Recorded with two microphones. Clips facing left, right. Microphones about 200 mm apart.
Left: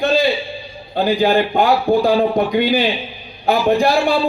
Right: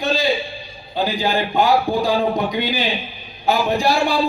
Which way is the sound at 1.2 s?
55° left (ahead or behind).